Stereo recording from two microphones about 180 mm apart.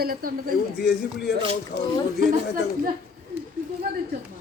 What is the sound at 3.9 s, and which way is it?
Speech, 60° right (ahead or behind).